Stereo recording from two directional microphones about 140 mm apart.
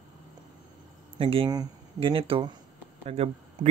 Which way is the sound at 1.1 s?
40° right (ahead or behind).